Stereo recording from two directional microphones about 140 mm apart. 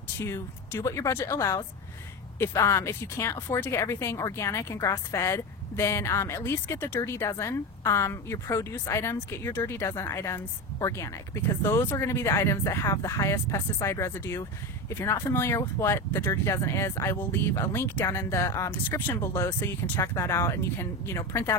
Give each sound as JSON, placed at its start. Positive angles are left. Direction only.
{"t": 0.2, "sound": "a woman's voice", "side_deg": 20}